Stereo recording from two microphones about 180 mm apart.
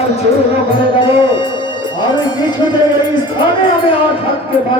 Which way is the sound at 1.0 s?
30° left (ahead or behind).